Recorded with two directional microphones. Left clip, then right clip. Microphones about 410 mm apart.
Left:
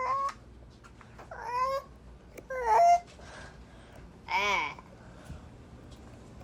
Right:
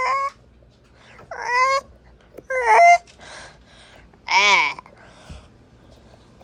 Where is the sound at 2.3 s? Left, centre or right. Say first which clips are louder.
Right 10 dB; centre.